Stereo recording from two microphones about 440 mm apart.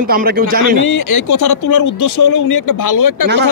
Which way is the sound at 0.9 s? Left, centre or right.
Left.